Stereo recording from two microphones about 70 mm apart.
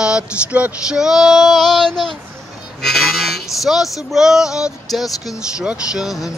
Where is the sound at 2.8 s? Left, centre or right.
Centre.